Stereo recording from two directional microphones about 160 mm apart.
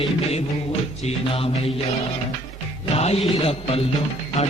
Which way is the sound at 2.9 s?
40° left (ahead or behind).